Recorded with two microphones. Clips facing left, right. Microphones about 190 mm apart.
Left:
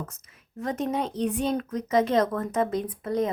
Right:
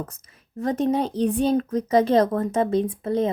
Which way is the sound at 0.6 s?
35° right (ahead or behind).